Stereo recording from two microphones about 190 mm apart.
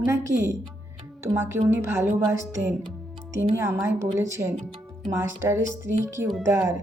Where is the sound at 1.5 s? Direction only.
15° right (ahead or behind).